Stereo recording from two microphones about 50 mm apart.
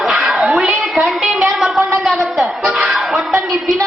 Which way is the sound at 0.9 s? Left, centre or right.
Centre.